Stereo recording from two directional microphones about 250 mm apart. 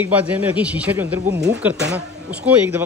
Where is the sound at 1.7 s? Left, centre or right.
Right.